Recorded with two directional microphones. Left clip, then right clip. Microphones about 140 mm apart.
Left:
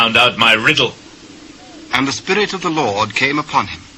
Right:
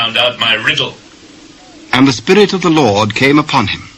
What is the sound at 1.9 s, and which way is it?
A man's voice, 25° right (ahead or behind).